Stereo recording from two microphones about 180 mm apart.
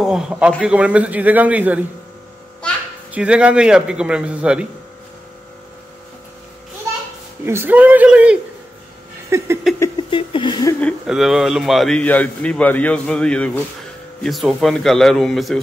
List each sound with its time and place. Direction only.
0.0 s a man's voice: 5° right (ahead or behind)
3.1 s a man's voice: 5° right (ahead or behind)
7.4 s a man's voice: 10° right (ahead or behind)
10.1 s a sound: 25° left (ahead or behind)
11.1 s a man's voice: centre (ahead or behind)